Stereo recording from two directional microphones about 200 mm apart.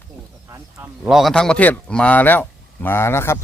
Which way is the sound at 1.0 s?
Centre (ahead or behind).